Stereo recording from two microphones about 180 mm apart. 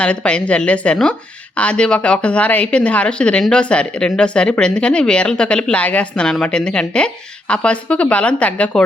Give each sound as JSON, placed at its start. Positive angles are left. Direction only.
{"t": 0.0, "sound": "a woman's voice", "side_deg": 5}